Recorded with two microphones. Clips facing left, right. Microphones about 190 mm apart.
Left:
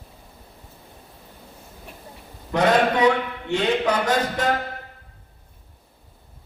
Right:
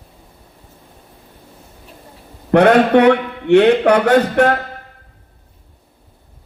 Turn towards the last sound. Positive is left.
turn(degrees=-65)  # may be behind; listen again after turning